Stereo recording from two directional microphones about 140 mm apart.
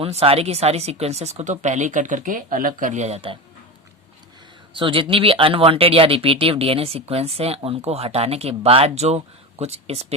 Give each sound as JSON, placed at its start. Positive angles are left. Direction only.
{"t": 0.0, "sound": "speech", "side_deg": -45}
{"t": 4.7, "sound": "speech", "side_deg": -40}